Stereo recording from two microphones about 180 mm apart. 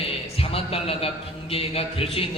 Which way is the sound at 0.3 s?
30° left (ahead or behind).